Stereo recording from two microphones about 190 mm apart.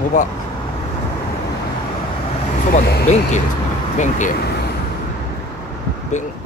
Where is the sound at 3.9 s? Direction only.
40° left (ahead or behind).